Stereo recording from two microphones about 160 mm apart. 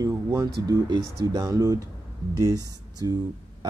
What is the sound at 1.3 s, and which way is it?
Speech, 20° right (ahead or behind).